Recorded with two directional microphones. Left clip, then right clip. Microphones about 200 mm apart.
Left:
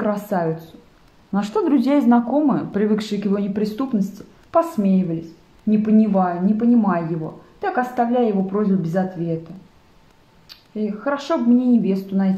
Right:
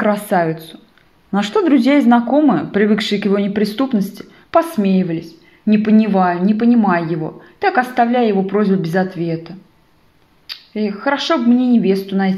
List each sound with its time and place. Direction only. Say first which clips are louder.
0.0 s speech: right 6 dB; 15° right (ahead or behind)
10.5 s speech: right 5 dB; 15° right (ahead or behind)